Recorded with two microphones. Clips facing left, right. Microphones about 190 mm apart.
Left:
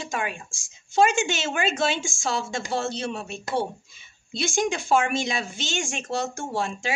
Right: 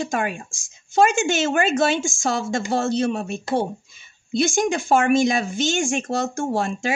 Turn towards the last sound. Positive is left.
turn(degrees=-45)  # may be behind; listen again after turning